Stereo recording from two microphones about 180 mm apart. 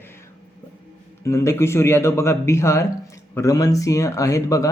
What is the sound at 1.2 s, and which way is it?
Speech, 15° left (ahead or behind).